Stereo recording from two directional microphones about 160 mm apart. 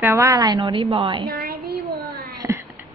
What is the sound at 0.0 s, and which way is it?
A woman's voice, 15° right (ahead or behind).